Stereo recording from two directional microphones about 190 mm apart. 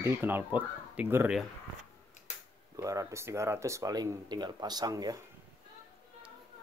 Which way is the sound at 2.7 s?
15° right (ahead or behind).